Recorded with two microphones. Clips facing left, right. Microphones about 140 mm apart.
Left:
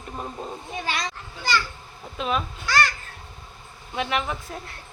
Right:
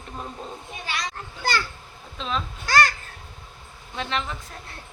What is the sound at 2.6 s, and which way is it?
Babbling, 40° right (ahead or behind).